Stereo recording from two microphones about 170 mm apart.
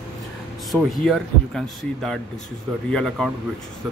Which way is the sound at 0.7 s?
Centre (ahead or behind).